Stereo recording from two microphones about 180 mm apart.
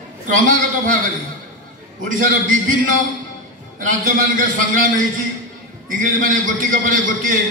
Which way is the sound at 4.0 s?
50° right (ahead or behind).